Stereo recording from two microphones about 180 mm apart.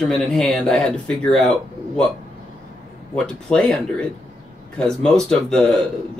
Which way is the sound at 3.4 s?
5° left (ahead or behind).